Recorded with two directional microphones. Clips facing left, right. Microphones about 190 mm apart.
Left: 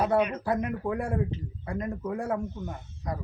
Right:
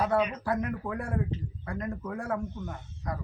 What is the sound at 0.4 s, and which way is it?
Speech, 25° left (ahead or behind).